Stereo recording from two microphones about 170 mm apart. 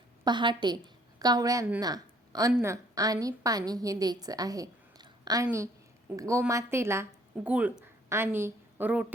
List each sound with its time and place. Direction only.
0.3 s a woman's voice: 25° right (ahead or behind)
1.8 s a sound: 20° right (ahead or behind)
2.6 s a woman's voice: 20° right (ahead or behind)